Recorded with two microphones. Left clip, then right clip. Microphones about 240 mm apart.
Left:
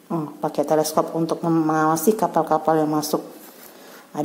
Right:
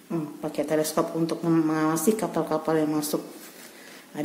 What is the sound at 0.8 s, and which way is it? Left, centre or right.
A woman's voice, centre.